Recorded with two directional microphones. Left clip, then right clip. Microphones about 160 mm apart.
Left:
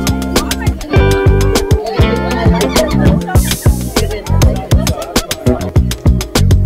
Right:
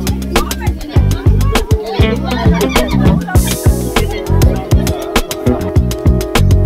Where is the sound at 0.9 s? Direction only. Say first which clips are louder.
Left 10 dB; centre (ahead or behind).